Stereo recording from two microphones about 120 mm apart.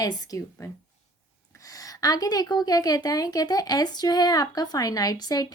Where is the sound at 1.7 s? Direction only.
30° left (ahead or behind).